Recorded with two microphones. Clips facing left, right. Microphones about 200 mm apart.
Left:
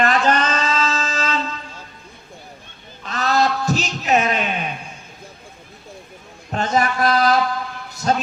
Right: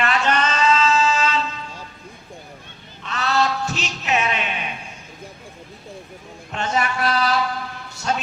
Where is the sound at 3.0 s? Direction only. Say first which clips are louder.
Left 2 dB; 35° left (ahead or behind).